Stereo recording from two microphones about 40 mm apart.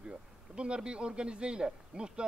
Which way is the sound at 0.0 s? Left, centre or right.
Right.